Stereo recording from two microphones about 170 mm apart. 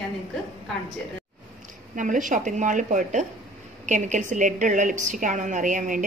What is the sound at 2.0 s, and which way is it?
A woman's voice, 50° right (ahead or behind).